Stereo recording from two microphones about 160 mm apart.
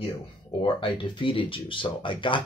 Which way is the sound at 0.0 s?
35° left (ahead or behind).